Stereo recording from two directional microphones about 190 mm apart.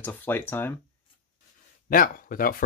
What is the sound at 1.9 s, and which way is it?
Speech, 50° left (ahead or behind).